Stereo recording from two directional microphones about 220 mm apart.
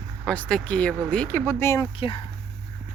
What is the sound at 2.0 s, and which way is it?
Speech, 25° left (ahead or behind).